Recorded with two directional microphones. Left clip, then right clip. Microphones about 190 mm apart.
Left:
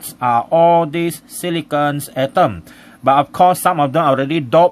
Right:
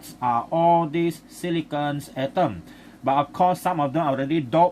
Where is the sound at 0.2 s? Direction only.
60° left (ahead or behind).